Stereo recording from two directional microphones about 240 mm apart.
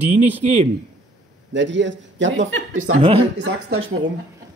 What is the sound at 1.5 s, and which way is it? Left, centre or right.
A man's voice, right.